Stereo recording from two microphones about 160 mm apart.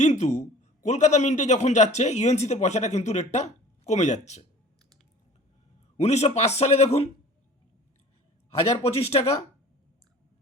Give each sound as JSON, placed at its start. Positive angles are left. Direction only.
{"t": 0.0, "sound": "a man's voice", "side_deg": 45}
{"t": 6.0, "sound": "a man's voice", "side_deg": 45}
{"t": 8.6, "sound": "speech", "side_deg": 40}